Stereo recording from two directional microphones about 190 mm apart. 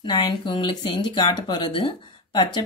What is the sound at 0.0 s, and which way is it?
Speech, 25° left (ahead or behind).